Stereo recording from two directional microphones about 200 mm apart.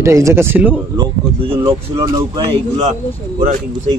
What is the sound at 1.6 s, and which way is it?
Speech, 15° right (ahead or behind).